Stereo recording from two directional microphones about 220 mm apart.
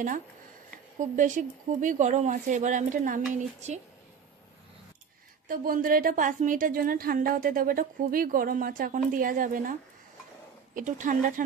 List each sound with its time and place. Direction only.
0.9 s a woman's voice: 35° right (ahead or behind)
5.5 s a woman's voice: 40° right (ahead or behind)